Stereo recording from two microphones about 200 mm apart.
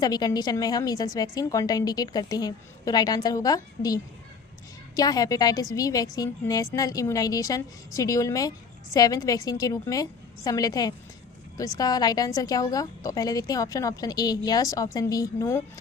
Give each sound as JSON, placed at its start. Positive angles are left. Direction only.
{"t": 0.0, "sound": "a woman's voice", "side_deg": 20}